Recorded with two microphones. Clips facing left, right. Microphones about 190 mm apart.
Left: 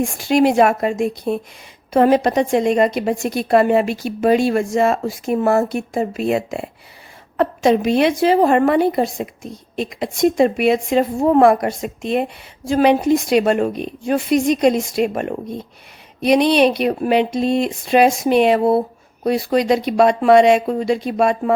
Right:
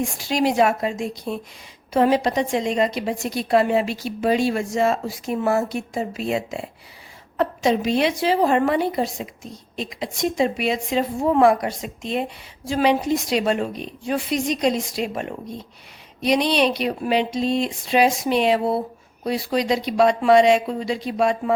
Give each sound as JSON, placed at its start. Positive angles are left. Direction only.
{"t": 0.0, "sound": "a woman's voice", "side_deg": 55}